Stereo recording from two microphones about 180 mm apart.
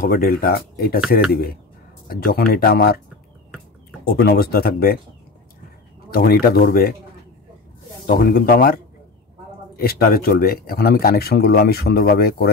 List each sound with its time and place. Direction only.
0.1 s speech: 55° left (ahead or behind)
2.0 s speech: 55° left (ahead or behind)
4.0 s speech: 55° left (ahead or behind)
6.0 s speech: 55° left (ahead or behind)
8.1 s speech: 55° left (ahead or behind)
9.8 s speech: 55° left (ahead or behind)